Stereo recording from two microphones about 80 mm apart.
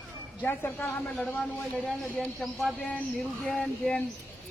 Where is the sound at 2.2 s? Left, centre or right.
Centre.